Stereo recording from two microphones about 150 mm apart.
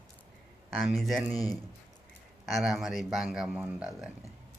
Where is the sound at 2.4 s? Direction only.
Centre (ahead or behind).